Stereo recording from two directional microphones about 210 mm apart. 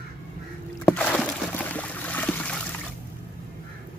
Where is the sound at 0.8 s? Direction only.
5° left (ahead or behind).